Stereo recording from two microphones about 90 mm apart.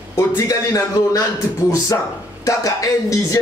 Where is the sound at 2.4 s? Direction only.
40° left (ahead or behind).